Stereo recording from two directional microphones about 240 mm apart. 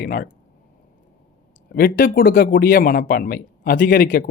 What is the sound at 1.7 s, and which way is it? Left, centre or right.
Speech, left.